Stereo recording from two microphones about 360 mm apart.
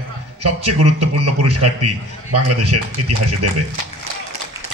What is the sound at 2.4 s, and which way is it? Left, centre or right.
Speech, right.